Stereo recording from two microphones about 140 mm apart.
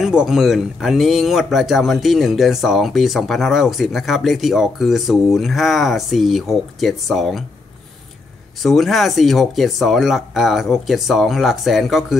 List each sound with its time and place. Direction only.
0.0 s speech: 5° right (ahead or behind)
8.6 s speech: centre (ahead or behind)